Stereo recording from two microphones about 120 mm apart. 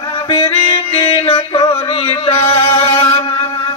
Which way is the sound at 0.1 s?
55° left (ahead or behind).